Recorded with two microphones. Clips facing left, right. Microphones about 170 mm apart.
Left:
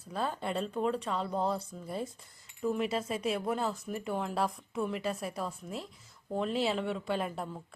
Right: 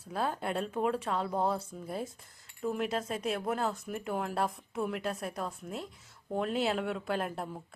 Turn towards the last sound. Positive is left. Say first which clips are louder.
# even
turn(degrees=0)  # may be behind; listen again after turning